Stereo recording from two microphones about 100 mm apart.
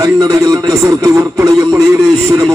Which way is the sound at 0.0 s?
35° right (ahead or behind).